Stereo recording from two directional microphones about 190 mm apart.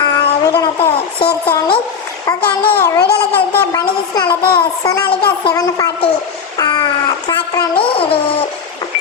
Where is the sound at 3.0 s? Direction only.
55° left (ahead or behind).